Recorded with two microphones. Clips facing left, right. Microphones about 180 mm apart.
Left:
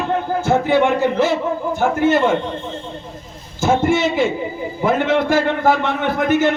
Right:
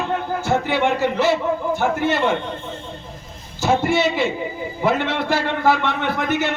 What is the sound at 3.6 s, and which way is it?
A man's voice, 50° left (ahead or behind).